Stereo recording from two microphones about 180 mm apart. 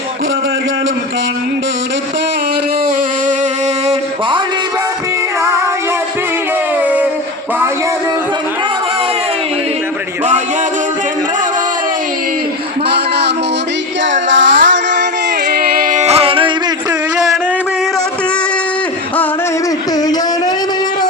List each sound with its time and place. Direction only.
12.9 s a sound: 70° right (ahead or behind)
14.1 s female singing: 90° right
15.5 s music: 55° right (ahead or behind); by 16.5 s 30° right (ahead or behind)